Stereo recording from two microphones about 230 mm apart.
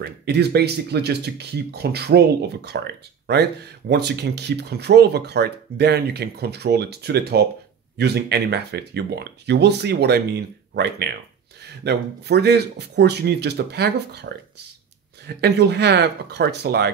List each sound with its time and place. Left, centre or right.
0.0 s speech: right
15.2 s speech: right